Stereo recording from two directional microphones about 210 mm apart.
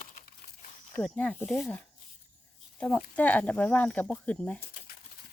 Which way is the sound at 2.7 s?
5° left (ahead or behind).